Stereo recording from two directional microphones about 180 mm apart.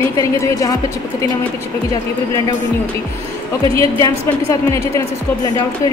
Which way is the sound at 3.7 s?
15° left (ahead or behind).